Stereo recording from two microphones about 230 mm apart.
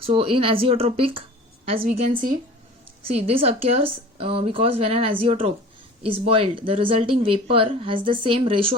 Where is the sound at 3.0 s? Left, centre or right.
Right.